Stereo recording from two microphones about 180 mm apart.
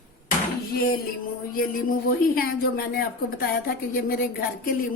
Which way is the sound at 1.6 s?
55° left (ahead or behind).